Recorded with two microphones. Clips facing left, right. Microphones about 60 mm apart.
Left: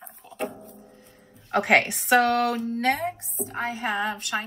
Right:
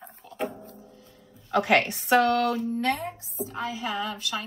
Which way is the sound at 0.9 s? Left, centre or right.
Left.